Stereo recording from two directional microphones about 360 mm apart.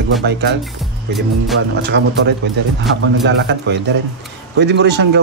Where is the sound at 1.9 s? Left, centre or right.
Right.